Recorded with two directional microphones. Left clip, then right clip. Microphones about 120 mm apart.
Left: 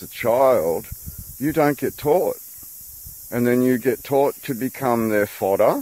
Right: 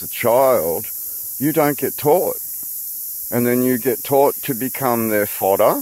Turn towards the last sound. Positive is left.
turn(degrees=-30)  # may be behind; listen again after turning